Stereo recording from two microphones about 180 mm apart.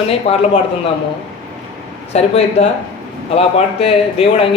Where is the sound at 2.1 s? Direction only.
35° left (ahead or behind).